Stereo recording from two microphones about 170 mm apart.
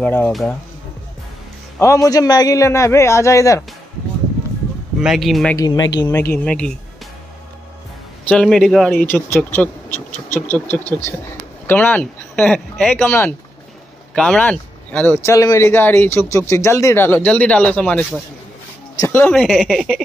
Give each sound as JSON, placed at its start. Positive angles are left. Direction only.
{"t": 0.0, "sound": "speech", "side_deg": 5}
{"t": 1.8, "sound": "speech", "side_deg": 20}
{"t": 5.0, "sound": "a man's voice", "side_deg": 0}
{"t": 5.6, "sound": "speech", "side_deg": 25}
{"t": 6.3, "sound": "speech", "side_deg": 5}
{"t": 8.3, "sound": "a man's voice", "side_deg": 5}
{"t": 19.3, "sound": "a man's voice", "side_deg": -5}